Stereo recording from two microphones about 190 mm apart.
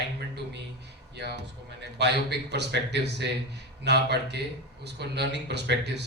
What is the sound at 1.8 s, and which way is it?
A man's voice, 60° right (ahead or behind).